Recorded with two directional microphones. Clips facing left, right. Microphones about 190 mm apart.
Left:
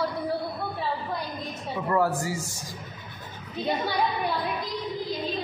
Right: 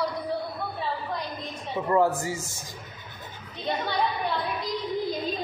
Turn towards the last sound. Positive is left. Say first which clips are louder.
# left 1 dB
turn(degrees=10)  # may be behind; listen again after turning